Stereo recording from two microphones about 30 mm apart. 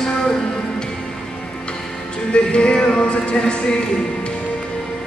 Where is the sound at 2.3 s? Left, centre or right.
Left.